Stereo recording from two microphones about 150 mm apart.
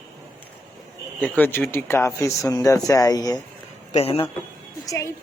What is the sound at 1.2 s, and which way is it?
Speech, 15° left (ahead or behind).